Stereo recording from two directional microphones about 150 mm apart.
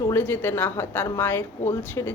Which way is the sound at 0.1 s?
15° left (ahead or behind).